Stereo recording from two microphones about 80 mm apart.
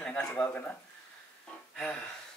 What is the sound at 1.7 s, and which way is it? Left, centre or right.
Music, centre.